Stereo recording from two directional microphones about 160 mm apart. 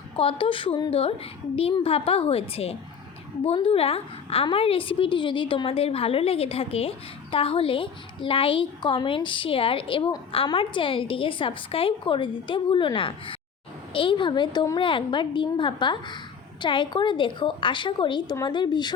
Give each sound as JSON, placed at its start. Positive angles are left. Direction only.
{"t": 0.2, "sound": "a woman's voice", "side_deg": 35}